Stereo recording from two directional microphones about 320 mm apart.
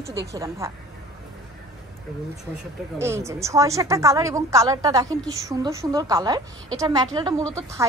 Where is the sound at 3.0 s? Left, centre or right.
Centre.